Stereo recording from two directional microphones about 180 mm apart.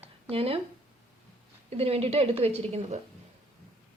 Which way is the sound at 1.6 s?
35° right (ahead or behind).